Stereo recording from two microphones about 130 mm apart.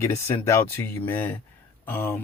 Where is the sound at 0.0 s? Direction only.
20° left (ahead or behind).